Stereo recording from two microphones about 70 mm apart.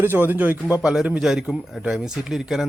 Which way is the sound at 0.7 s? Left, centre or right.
Centre.